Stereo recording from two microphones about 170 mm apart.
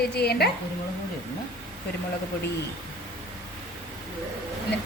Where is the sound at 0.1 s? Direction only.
70° left (ahead or behind).